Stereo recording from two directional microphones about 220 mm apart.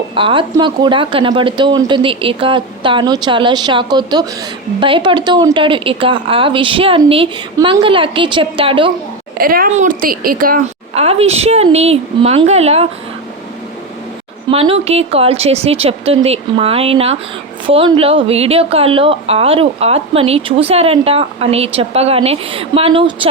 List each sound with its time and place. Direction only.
0.1 s a woman's voice: 25° right (ahead or behind)
9.4 s a woman's voice: 40° right (ahead or behind)
14.5 s a woman's voice: 25° right (ahead or behind)